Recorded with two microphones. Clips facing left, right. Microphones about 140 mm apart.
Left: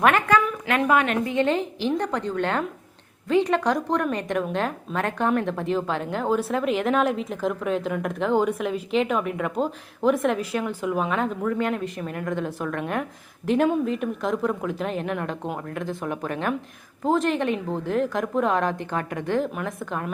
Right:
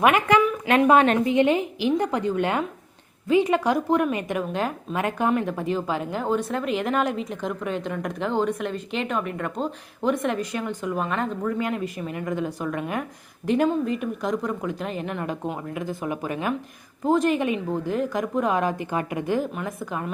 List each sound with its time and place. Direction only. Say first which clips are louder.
0.0 s a woman's voice: right 1 dB; 15° right (ahead or behind)